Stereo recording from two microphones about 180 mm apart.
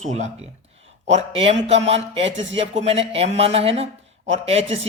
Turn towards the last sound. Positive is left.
turn(degrees=-35)  # may be behind; listen again after turning